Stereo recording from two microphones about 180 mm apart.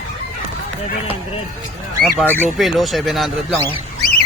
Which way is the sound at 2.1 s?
10° left (ahead or behind).